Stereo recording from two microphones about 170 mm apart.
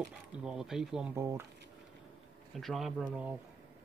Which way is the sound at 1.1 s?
15° right (ahead or behind).